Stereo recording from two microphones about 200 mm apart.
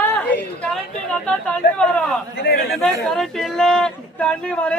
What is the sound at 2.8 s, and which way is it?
Speech, centre (ahead or behind).